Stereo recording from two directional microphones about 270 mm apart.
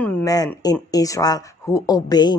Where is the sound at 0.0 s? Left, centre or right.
Centre.